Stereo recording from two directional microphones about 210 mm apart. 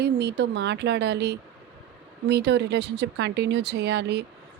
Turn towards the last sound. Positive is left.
turn(degrees=-55)  # may be behind; listen again after turning